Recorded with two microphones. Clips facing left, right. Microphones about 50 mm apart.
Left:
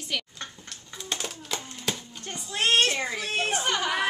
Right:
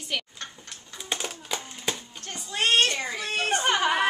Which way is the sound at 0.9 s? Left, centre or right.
Centre.